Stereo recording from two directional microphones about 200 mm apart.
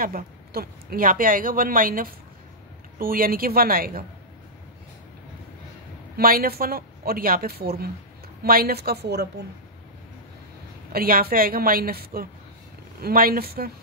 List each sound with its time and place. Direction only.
0.0 s speech: 45° right (ahead or behind)
6.1 s speech: 50° right (ahead or behind)
10.9 s speech: 50° right (ahead or behind)